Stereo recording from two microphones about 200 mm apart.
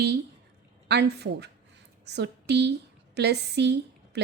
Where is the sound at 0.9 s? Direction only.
55° right (ahead or behind).